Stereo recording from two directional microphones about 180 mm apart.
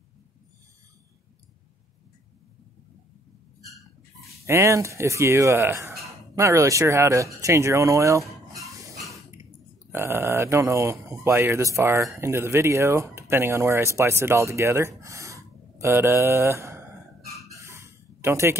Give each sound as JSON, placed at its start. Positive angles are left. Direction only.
{"t": 4.5, "sound": "speech", "side_deg": -15}
{"t": 9.9, "sound": "speech", "side_deg": -15}
{"t": 17.6, "sound": "a sound", "side_deg": -15}